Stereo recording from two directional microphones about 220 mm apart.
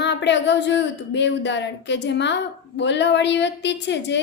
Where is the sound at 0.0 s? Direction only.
55° left (ahead or behind).